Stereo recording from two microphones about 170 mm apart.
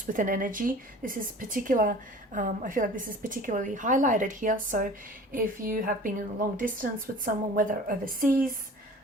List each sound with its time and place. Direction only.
0.0 s speech: 50° right (ahead or behind)